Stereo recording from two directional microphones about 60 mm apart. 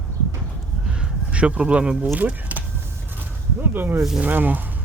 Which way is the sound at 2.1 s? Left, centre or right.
Right.